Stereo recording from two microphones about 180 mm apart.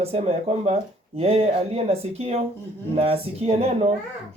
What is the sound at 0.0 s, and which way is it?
Speech, 35° right (ahead or behind).